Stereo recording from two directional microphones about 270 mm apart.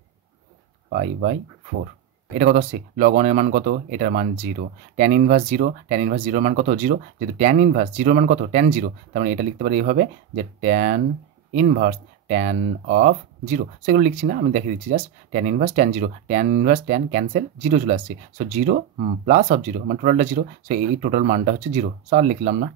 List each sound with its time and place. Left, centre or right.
0.8 s speech: right
2.3 s speech: right